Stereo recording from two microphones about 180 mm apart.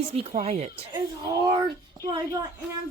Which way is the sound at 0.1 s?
35° right (ahead or behind).